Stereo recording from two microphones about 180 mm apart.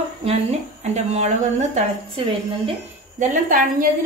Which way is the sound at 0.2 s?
35° right (ahead or behind).